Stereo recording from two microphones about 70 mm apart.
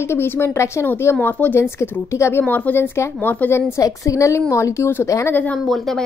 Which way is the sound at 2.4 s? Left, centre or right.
Left.